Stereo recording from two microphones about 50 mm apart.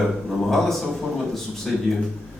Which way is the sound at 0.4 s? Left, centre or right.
Centre.